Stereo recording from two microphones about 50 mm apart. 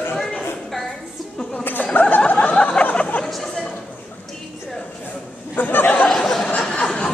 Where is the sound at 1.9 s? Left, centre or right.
Left.